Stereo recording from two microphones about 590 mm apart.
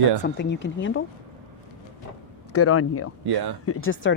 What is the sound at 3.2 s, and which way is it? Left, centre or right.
Speech, right.